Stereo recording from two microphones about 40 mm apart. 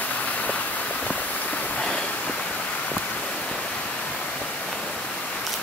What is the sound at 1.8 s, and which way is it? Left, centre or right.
Waves, left.